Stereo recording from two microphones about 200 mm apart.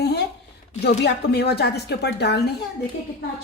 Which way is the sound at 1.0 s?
55° left (ahead or behind).